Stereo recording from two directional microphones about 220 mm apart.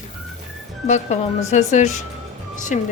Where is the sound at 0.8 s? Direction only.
30° left (ahead or behind).